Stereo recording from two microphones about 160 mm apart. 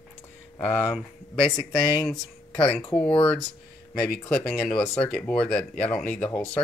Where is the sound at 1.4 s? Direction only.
35° left (ahead or behind).